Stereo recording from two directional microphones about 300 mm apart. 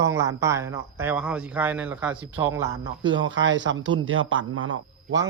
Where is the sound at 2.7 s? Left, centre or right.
Right.